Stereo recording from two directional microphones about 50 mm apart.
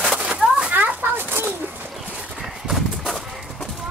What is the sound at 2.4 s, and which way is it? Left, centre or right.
Clip-clop, centre.